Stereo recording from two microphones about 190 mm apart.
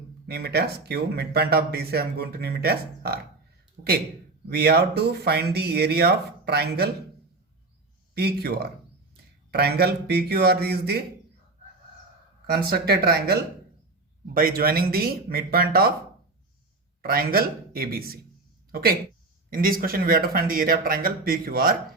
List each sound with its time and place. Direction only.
0.3 s speech: 60° right (ahead or behind)
3.8 s speech: 45° right (ahead or behind)
4.4 s speech: 55° right (ahead or behind)
8.1 s speech: 60° right (ahead or behind)
12.5 s speech: 55° right (ahead or behind)
17.0 s a man's voice: 50° right (ahead or behind)